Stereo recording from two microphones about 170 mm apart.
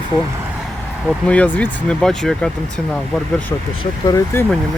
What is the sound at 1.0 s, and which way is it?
Speech, 5° left (ahead or behind).